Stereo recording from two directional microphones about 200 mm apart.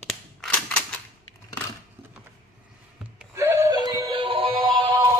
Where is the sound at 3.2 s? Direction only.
15° right (ahead or behind).